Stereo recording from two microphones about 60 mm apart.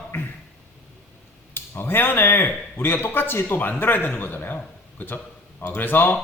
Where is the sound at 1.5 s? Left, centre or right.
Left.